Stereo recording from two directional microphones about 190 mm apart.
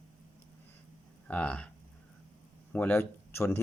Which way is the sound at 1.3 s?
5° left (ahead or behind).